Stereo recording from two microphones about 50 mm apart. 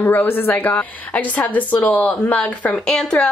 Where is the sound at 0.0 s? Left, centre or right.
Left.